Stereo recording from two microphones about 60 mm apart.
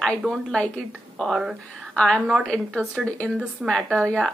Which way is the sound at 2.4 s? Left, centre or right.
Centre.